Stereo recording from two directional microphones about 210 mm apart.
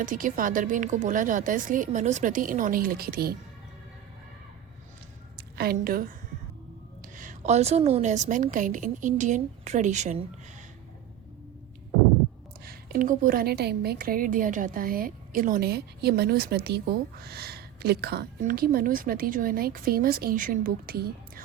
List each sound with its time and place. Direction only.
0.0 s a woman's voice: 40° right (ahead or behind)
5.4 s a woman's voice: 45° right (ahead or behind)
7.2 s a woman's voice: 35° right (ahead or behind)
12.6 s a woman's voice: 45° right (ahead or behind)